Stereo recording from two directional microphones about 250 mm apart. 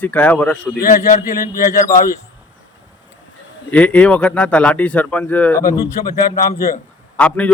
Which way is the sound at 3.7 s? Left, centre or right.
Centre.